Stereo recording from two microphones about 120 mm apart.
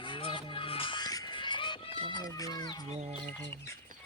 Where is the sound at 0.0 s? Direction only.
45° left (ahead or behind).